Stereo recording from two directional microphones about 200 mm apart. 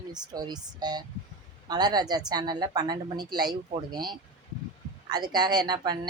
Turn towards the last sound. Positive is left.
turn(degrees=-20)  # may be behind; listen again after turning